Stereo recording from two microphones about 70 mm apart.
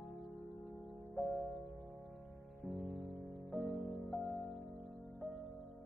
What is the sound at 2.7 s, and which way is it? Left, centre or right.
Music, left.